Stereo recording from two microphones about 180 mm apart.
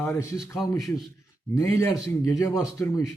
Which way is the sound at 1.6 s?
15° left (ahead or behind).